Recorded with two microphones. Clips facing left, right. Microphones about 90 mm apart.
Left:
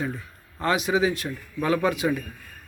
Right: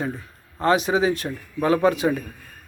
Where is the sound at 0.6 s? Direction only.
30° right (ahead or behind).